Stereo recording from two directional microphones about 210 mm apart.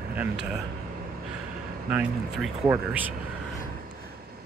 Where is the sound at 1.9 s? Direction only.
5° right (ahead or behind).